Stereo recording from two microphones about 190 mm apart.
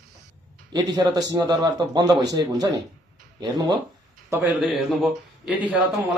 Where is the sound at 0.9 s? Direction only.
20° right (ahead or behind).